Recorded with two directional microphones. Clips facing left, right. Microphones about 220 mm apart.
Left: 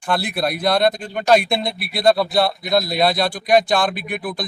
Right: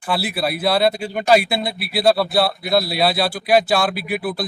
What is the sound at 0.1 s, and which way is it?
Speech, 5° right (ahead or behind).